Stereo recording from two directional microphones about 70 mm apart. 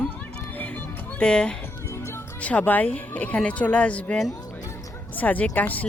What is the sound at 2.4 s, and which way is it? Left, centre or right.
Speech, left.